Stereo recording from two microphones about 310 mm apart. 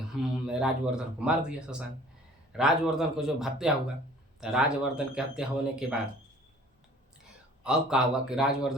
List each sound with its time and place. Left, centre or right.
0.4 s speech: centre
7.6 s speech: centre